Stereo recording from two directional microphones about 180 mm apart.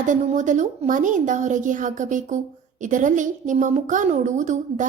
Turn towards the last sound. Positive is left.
turn(degrees=-45)  # may be behind; listen again after turning